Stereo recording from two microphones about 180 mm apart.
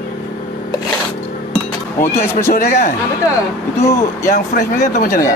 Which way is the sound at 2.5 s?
50° left (ahead or behind).